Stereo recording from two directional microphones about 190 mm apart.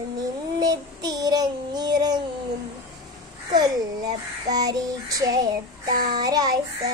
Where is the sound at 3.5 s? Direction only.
20° right (ahead or behind).